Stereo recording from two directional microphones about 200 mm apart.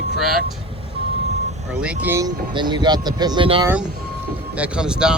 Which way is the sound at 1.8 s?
10° right (ahead or behind).